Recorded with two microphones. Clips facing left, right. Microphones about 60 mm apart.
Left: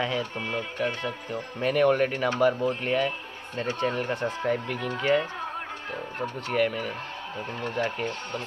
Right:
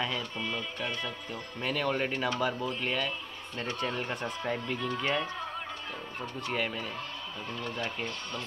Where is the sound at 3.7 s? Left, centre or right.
Left.